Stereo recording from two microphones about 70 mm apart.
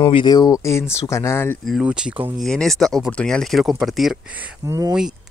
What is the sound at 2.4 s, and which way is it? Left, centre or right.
Speech, centre.